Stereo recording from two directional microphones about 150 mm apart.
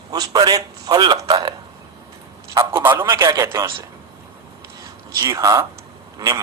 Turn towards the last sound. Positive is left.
turn(degrees=-20)  # may be behind; listen again after turning